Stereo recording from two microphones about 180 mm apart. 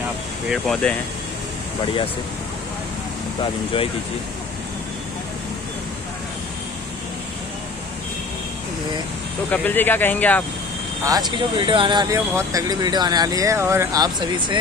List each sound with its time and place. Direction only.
0.5 s speech: 5° left (ahead or behind)
9.5 s speech: 10° left (ahead or behind)
11.1 s speech: 25° right (ahead or behind)